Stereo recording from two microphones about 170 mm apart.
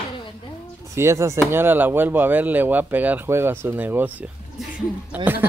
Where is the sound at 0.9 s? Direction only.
15° right (ahead or behind).